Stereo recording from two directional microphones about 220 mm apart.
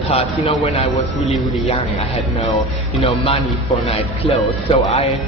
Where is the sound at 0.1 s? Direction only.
30° left (ahead or behind).